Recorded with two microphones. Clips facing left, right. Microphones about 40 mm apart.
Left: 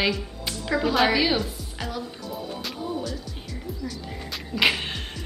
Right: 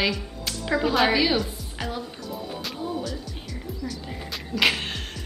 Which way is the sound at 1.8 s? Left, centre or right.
Centre.